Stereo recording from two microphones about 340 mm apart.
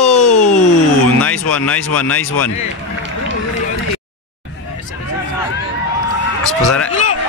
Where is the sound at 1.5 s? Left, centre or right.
Centre.